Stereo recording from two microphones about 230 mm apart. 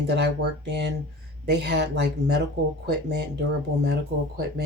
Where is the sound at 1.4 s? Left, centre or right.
Right.